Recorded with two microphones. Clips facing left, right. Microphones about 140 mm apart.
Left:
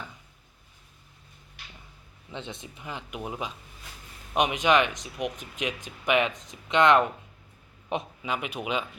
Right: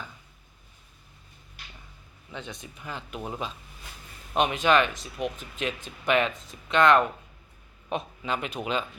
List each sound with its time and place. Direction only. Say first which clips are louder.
2.3 s speech: left 1 dB; 25° left (ahead or behind)
8.2 s speech: right 1 dB; 10° left (ahead or behind)